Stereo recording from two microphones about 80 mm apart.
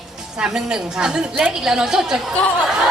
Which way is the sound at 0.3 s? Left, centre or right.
Centre.